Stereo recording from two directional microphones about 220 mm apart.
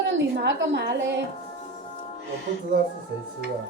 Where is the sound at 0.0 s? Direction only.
55° right (ahead or behind).